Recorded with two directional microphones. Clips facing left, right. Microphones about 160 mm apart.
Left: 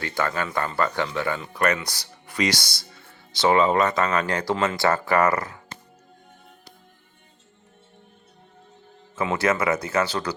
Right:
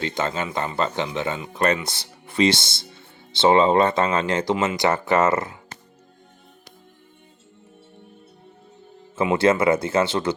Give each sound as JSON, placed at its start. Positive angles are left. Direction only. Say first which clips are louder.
{"t": 0.0, "sound": "speech", "louder": "right 1 dB", "side_deg": -20}
{"t": 9.1, "sound": "speech", "louder": "right 4 dB", "side_deg": -25}